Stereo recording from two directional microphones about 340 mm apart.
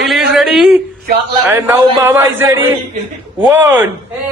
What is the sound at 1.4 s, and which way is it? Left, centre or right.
A man's voice, centre.